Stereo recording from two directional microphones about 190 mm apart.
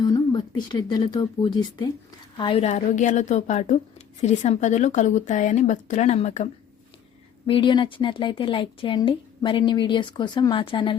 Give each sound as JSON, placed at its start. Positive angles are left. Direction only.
{"t": 0.0, "sound": "speech", "side_deg": 25}
{"t": 7.4, "sound": "a woman's voice", "side_deg": 25}